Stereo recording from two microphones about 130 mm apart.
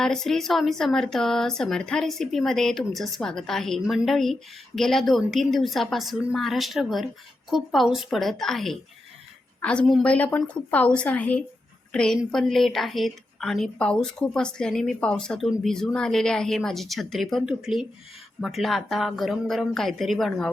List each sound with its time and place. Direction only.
0.0 s a woman's voice: 5° left (ahead or behind)